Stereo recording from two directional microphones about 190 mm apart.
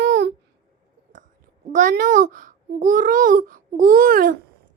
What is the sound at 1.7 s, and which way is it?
A child's voice, 45° right (ahead or behind).